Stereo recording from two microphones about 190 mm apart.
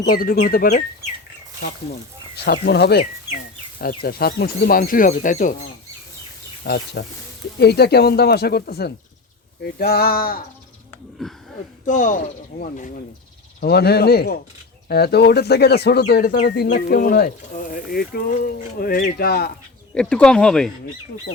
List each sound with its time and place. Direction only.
0.0 s speech: 50° left (ahead or behind)
2.3 s speech: 60° left (ahead or behind); by 5.6 s 40° left (ahead or behind)
6.7 s speech: 55° left (ahead or behind)
11.2 s speech: centre (ahead or behind)
11.9 s speech: 45° left (ahead or behind)
13.6 s speech: 60° left (ahead or behind)
19.9 s speech: 5° left (ahead or behind)